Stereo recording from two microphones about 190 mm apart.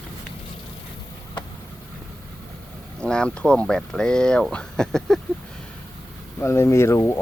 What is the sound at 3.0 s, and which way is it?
Speech, 5° left (ahead or behind).